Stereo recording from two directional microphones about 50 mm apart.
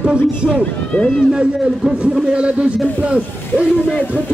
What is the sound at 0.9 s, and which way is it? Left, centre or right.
Speech, centre.